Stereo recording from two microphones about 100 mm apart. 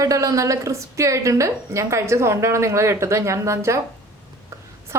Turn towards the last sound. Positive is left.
turn(degrees=-30)  # may be behind; listen again after turning